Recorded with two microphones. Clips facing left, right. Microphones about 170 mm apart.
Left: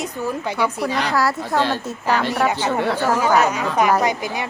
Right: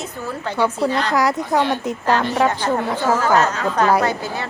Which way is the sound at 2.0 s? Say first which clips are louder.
Right 1 dB; 10° left (ahead or behind).